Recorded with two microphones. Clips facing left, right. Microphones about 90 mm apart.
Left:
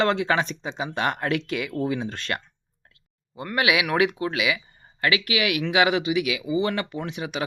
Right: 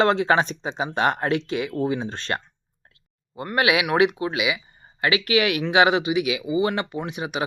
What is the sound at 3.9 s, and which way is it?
Speech, 20° right (ahead or behind).